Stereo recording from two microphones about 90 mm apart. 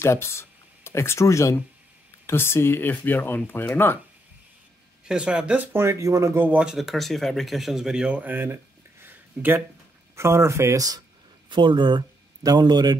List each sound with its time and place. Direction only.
0.0 s speech: 30° left (ahead or behind)
5.0 s speech: 10° right (ahead or behind)
5.7 s speech: 30° right (ahead or behind)
6.4 s speech: 15° right (ahead or behind)
6.7 s speech: centre (ahead or behind); by 8.5 s 20° right (ahead or behind)
9.0 s a sound: 20° right (ahead or behind)
10.1 s speech: 30° right (ahead or behind)
11.4 s a man's voice: 60° right (ahead or behind)